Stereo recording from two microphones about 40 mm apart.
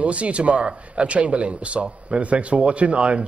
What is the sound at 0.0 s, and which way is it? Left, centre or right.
Speech, right.